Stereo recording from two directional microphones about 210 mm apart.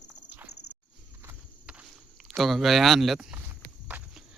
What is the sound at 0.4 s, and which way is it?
Walk, 90° left.